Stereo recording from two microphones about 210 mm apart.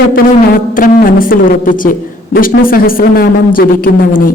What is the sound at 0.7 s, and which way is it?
A woman's voice, 40° left (ahead or behind).